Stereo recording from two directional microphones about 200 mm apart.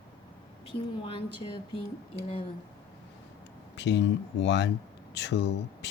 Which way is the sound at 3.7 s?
65° left (ahead or behind).